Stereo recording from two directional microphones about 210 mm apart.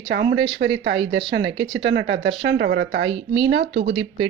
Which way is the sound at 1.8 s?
60° right (ahead or behind).